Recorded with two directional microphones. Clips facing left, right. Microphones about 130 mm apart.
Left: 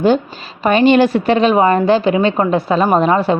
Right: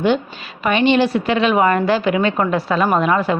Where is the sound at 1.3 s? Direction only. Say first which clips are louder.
Left 3 dB; 35° left (ahead or behind).